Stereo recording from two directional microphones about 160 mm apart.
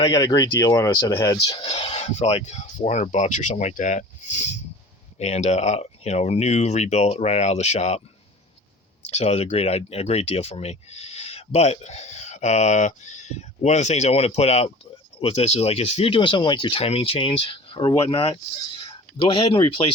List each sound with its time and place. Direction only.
0.0 s speech: 25° left (ahead or behind)
1.5 s speech: 35° left (ahead or behind)
9.0 s speech: 45° left (ahead or behind)